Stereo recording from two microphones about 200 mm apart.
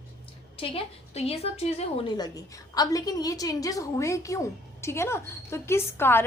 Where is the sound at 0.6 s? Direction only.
30° left (ahead or behind).